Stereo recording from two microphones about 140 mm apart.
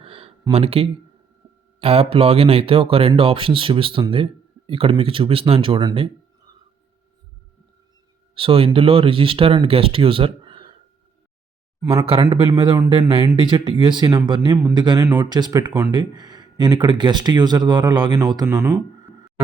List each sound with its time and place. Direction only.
0.0 s a sound: 40° right (ahead or behind)
0.5 s speech: 45° right (ahead or behind)
8.4 s speech: 40° right (ahead or behind)
11.8 s speech: 25° right (ahead or behind)
12.3 s speech: 35° right (ahead or behind)
18.4 s speech: 15° right (ahead or behind)